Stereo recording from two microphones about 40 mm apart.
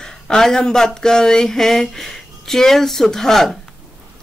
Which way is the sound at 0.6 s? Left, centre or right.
Centre.